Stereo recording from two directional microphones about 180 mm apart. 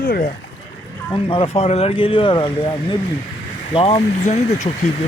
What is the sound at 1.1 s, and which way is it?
Speech, 30° left (ahead or behind).